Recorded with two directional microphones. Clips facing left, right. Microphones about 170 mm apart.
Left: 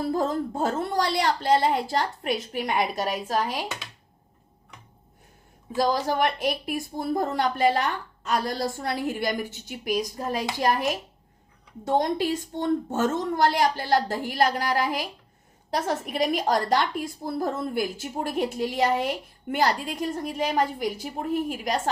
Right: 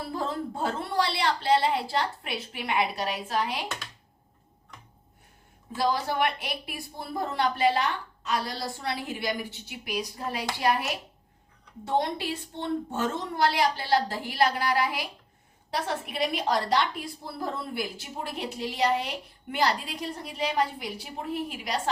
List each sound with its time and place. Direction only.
0.0 s a woman's voice: 45° left (ahead or behind)
5.7 s a woman's voice: 40° left (ahead or behind)
11.9 s a woman's voice: 45° left (ahead or behind)